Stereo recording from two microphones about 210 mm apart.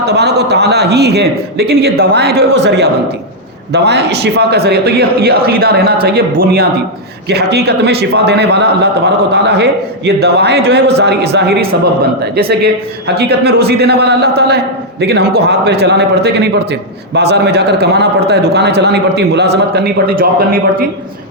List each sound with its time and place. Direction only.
0.0 s a man's voice: 50° right (ahead or behind)